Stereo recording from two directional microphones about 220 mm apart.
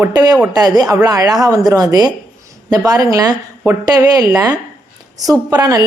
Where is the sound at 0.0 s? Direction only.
15° right (ahead or behind).